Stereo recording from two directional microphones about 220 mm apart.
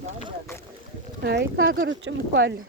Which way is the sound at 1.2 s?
50° right (ahead or behind).